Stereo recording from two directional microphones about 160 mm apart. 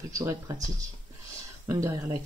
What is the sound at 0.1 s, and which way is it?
Speech, 20° right (ahead or behind).